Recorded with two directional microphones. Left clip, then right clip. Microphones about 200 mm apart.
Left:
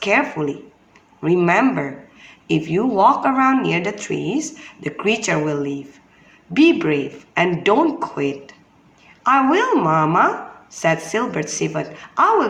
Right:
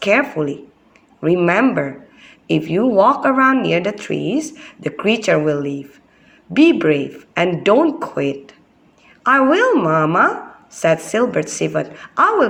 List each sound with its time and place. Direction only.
0.0 s a man's voice: 20° right (ahead or behind)